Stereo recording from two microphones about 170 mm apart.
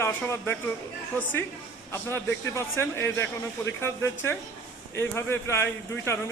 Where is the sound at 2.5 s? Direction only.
15° left (ahead or behind).